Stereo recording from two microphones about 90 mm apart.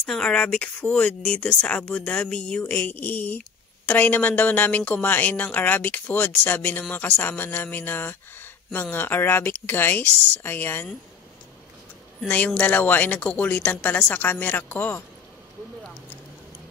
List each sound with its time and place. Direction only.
0.0 s speech: 5° left (ahead or behind)
2.6 s speech: 20° left (ahead or behind)
12.3 s speech: 15° left (ahead or behind)